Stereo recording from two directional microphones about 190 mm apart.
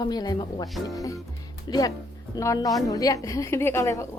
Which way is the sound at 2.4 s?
20° left (ahead or behind).